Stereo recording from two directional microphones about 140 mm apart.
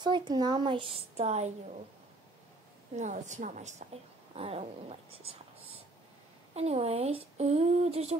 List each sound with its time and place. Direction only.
0.0 s speech: 30° right (ahead or behind); by 1.5 s 50° right (ahead or behind)
3.0 s a woman's voice: 60° right (ahead or behind)
4.4 s speech: 45° right (ahead or behind)
6.5 s speech: 50° right (ahead or behind)